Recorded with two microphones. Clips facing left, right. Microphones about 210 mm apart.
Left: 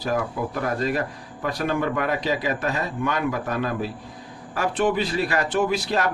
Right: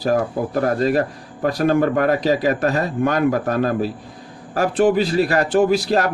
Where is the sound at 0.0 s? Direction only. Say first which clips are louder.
Right 6 dB; 40° right (ahead or behind).